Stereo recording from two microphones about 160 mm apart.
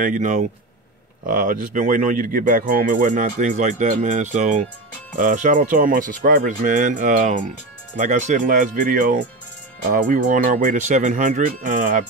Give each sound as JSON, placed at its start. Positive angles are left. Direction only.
{"t": 0.0, "sound": "speech", "side_deg": -55}